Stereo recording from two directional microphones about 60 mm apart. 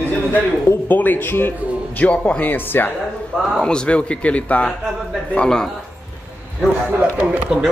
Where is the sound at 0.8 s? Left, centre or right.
Left.